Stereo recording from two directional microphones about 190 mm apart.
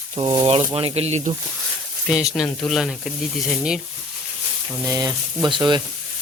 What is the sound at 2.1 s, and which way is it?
Speech, centre (ahead or behind).